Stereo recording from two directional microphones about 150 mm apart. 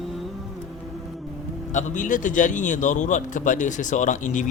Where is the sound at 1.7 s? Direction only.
60° left (ahead or behind).